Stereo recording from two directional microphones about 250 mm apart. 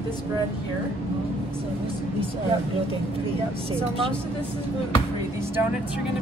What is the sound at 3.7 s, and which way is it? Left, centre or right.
Speech, right.